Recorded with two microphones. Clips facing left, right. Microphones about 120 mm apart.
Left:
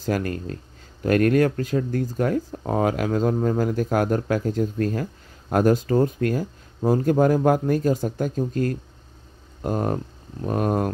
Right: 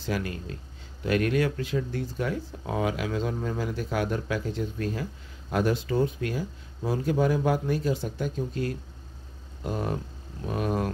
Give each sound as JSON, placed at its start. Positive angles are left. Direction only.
{"t": 0.0, "sound": "speech", "side_deg": 45}